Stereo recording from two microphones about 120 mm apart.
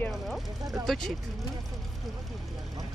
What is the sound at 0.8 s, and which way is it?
Speech, 5° left (ahead or behind).